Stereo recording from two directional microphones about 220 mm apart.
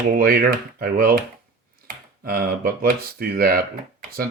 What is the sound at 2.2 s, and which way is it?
Speech, 40° right (ahead or behind).